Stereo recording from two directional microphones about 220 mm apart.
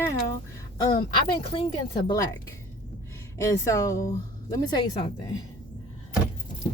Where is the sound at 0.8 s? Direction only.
20° left (ahead or behind).